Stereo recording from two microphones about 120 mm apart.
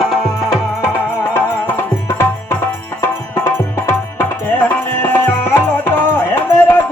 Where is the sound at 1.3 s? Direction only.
15° left (ahead or behind).